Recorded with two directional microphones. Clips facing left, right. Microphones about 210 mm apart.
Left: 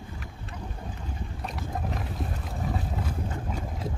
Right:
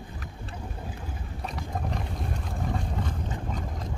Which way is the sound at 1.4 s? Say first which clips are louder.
Right 1 dB; centre (ahead or behind).